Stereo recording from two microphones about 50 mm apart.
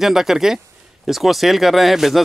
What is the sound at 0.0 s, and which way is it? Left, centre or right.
Speech, centre.